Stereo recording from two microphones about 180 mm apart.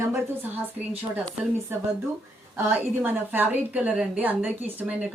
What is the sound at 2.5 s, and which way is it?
A woman's voice, 10° right (ahead or behind).